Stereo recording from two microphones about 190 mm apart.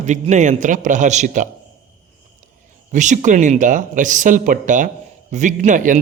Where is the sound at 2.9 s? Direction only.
40° right (ahead or behind).